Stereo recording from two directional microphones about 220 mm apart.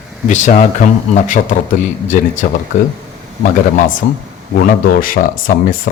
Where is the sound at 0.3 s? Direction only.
35° left (ahead or behind).